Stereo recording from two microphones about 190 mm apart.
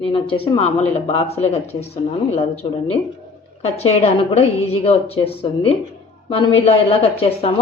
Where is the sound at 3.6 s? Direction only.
35° left (ahead or behind).